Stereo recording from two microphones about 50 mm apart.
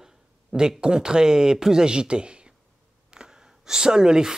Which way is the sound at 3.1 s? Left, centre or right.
Centre.